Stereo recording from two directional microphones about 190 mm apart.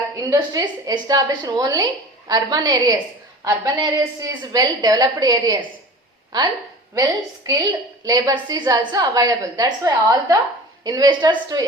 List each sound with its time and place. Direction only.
0.3 s a woman's voice: 20° right (ahead or behind)